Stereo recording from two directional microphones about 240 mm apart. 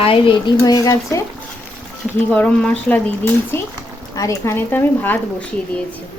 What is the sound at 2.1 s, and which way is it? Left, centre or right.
Speech, centre.